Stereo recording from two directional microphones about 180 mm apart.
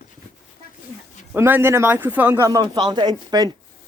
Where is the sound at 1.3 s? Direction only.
10° right (ahead or behind).